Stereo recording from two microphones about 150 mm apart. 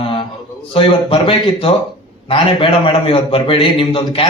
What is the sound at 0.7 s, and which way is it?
A man's voice, 35° left (ahead or behind).